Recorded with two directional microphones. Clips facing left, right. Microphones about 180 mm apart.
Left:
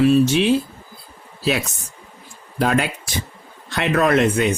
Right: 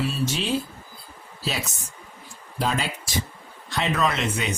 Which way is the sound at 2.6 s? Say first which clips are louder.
Left 7 dB; 60° left (ahead or behind).